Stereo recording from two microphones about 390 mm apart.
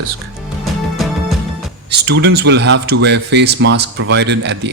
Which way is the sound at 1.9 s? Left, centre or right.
Right.